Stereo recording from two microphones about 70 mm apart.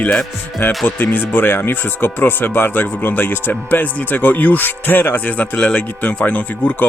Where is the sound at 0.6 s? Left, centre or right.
Left.